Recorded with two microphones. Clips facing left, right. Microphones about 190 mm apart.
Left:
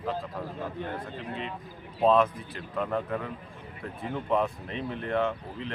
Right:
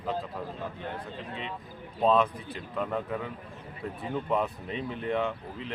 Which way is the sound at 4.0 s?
Centre (ahead or behind).